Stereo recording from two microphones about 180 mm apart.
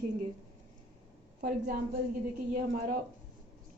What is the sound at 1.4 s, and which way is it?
A woman's voice, 50° right (ahead or behind).